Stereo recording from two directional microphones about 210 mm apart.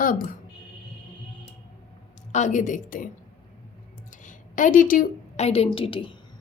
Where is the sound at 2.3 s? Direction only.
35° left (ahead or behind).